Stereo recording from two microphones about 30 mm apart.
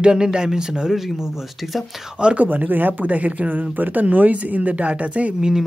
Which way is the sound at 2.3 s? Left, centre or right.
Right.